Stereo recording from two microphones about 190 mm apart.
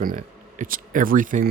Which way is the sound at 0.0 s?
45° right (ahead or behind).